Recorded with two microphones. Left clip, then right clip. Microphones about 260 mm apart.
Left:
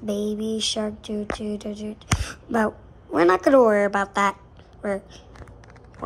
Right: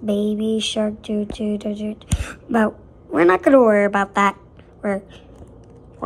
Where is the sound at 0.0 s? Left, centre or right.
Centre.